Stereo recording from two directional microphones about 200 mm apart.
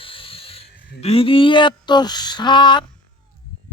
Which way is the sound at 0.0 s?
25° left (ahead or behind).